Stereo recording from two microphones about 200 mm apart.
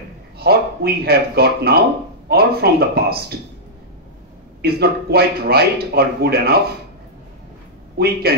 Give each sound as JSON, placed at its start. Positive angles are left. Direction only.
{"t": 0.4, "sound": "speech", "side_deg": -50}
{"t": 4.6, "sound": "speech", "side_deg": -50}
{"t": 8.0, "sound": "speech", "side_deg": -50}